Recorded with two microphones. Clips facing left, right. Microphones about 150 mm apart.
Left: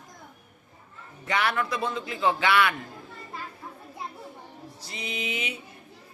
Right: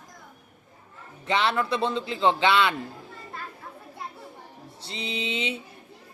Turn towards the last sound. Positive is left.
turn(degrees=-25)  # may be behind; listen again after turning